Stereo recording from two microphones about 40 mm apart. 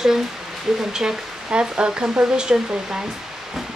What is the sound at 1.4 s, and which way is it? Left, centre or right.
Speech, right.